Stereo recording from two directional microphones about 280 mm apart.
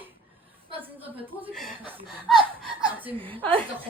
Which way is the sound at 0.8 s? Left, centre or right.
Centre.